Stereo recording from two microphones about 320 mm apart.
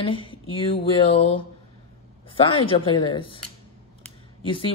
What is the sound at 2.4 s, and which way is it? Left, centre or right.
Speech, centre.